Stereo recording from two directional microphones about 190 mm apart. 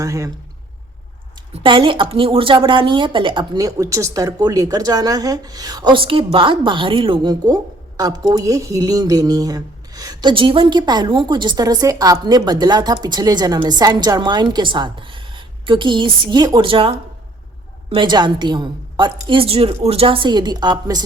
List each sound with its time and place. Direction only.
0.0 s a man's voice: 15° right (ahead or behind)
1.6 s a woman's voice: 25° right (ahead or behind)